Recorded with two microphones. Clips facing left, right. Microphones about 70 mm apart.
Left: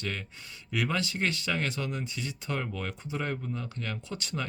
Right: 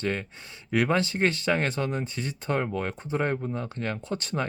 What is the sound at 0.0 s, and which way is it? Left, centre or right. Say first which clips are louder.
Speech: right 7 dB; right.